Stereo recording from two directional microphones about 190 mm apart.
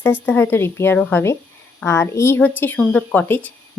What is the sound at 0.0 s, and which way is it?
Speech, 10° left (ahead or behind).